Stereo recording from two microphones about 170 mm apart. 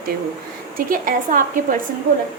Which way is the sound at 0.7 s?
55° right (ahead or behind).